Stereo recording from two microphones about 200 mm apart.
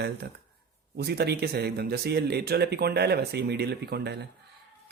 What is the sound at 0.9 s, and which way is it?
Speech, 55° right (ahead or behind).